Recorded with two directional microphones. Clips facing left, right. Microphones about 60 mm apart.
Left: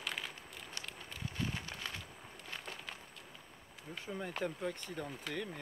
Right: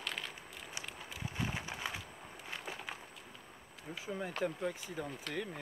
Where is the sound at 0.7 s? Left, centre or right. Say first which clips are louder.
Right 2 dB; centre.